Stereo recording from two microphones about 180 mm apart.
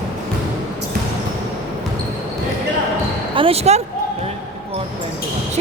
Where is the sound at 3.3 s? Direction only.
35° right (ahead or behind).